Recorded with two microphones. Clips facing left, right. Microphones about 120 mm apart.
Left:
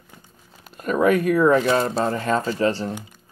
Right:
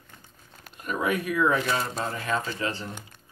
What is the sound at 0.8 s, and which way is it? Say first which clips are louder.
Speech: left 9 dB; 45° left (ahead or behind).